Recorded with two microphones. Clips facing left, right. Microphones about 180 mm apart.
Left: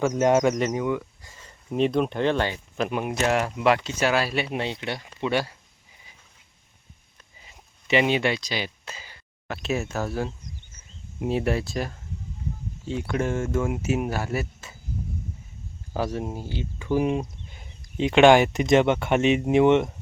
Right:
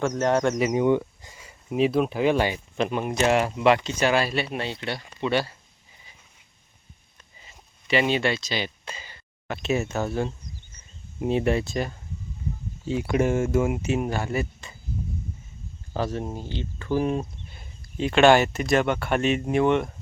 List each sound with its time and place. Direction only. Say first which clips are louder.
0.0 s speech: left 2 dB; 10° left (ahead or behind)
0.8 s speech: right 5 dB; 25° right (ahead or behind)
1.4 s speech: right 1 dB; 5° right (ahead or behind)
2.7 s speech: even; 5° left (ahead or behind)
4.4 s speech: left 1 dB; 20° left (ahead or behind)
7.9 s speech: left 1 dB; 15° left (ahead or behind)
15.9 s speech: even; 10° left (ahead or behind)